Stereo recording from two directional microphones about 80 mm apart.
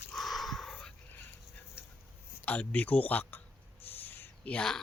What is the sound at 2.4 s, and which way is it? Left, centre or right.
Speech, centre.